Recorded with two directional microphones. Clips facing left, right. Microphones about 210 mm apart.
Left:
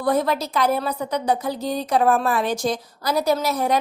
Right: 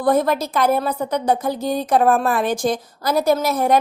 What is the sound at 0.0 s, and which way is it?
A woman's voice, 50° right (ahead or behind).